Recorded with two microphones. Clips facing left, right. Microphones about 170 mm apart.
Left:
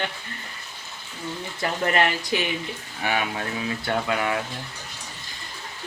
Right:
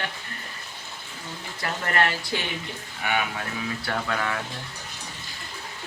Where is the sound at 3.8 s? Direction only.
20° left (ahead or behind).